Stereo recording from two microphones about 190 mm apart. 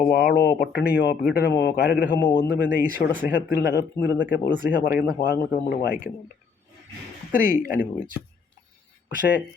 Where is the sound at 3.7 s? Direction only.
60° left (ahead or behind).